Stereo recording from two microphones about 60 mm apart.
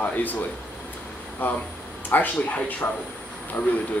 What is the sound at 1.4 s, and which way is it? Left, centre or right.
Speech, left.